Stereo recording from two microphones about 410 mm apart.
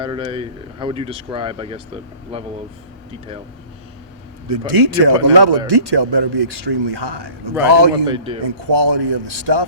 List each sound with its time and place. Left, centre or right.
0.0 s speech: centre
4.4 s a man's voice: right
8.0 s speech: centre
8.4 s speech: right